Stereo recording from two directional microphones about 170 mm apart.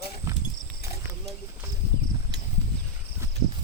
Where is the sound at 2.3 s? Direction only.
85° right.